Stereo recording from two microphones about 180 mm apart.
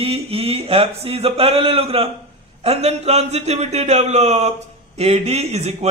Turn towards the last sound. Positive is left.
turn(degrees=-35)  # may be behind; listen again after turning